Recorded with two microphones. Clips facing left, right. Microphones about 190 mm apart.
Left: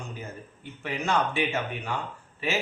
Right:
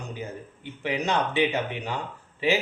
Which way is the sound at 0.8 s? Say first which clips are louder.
Right 1 dB; 20° right (ahead or behind).